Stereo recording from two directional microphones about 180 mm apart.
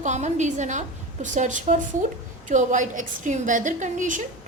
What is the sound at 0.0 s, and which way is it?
A woman's voice, 40° right (ahead or behind).